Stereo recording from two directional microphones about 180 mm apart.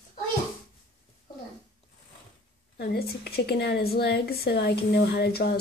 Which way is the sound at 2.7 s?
60° left (ahead or behind).